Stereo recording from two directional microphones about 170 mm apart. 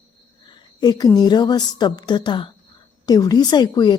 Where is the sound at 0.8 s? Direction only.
25° left (ahead or behind).